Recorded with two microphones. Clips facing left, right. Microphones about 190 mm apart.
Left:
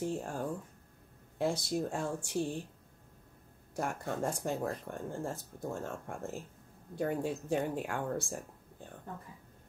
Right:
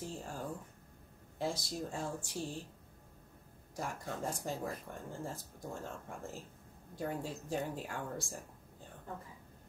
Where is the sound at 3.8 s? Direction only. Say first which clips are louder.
Left 5 dB; 60° left (ahead or behind).